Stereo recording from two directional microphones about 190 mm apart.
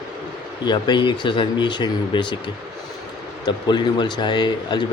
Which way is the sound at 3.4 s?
20° left (ahead or behind).